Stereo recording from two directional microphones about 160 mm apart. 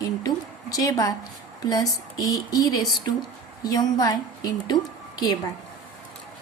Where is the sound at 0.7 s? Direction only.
20° left (ahead or behind).